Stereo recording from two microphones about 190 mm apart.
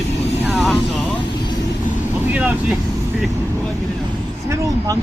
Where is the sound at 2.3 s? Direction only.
10° right (ahead or behind).